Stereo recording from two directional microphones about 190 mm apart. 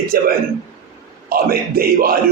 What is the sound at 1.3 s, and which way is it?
Speech, 50° right (ahead or behind).